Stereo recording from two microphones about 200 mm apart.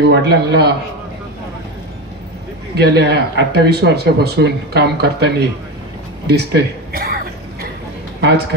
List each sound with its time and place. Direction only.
0.0 s speech: 60° right (ahead or behind)
2.7 s speech: 55° right (ahead or behind)
8.2 s a man's voice: 55° right (ahead or behind)